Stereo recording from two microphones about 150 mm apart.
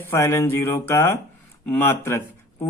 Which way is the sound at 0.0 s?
15° left (ahead or behind).